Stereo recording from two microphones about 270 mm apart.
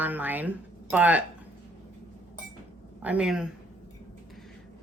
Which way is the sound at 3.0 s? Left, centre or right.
Centre.